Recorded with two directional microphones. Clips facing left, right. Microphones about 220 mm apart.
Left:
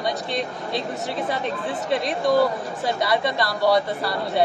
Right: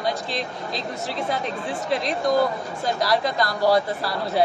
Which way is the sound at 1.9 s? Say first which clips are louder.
Left 1 dB; centre (ahead or behind).